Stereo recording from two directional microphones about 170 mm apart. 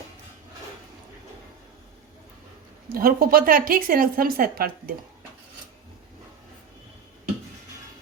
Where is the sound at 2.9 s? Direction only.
60° right (ahead or behind).